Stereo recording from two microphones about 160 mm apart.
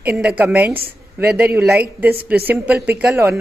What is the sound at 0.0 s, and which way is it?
A woman's voice, 10° right (ahead or behind).